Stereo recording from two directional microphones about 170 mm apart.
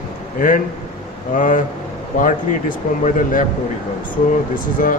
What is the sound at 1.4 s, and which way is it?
Speech, 50° left (ahead or behind).